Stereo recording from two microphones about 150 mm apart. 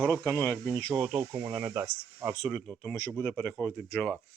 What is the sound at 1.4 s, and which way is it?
Speech, 15° right (ahead or behind).